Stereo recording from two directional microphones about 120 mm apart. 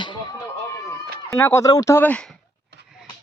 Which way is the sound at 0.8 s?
20° left (ahead or behind).